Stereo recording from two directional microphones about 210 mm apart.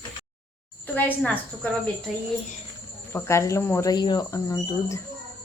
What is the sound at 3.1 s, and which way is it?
Speech, 15° left (ahead or behind).